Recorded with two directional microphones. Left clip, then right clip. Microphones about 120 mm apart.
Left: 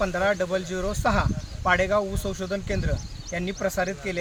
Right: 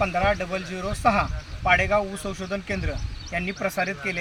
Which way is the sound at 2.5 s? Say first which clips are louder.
Right 1 dB; 15° left (ahead or behind).